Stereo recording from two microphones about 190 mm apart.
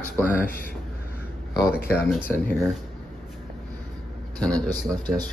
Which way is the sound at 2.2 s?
10° left (ahead or behind).